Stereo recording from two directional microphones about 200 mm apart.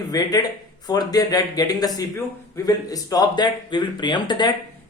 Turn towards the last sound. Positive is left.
turn(degrees=20)  # may be behind; listen again after turning